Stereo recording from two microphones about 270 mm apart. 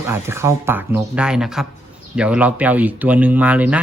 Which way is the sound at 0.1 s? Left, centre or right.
Centre.